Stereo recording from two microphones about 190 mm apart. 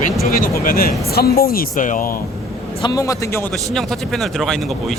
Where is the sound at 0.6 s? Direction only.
50° left (ahead or behind).